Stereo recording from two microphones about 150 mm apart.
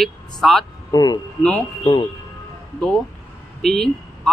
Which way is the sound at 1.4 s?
5° left (ahead or behind).